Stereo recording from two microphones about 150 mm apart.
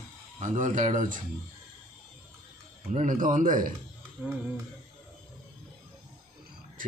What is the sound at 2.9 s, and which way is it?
Speech, 60° right (ahead or behind).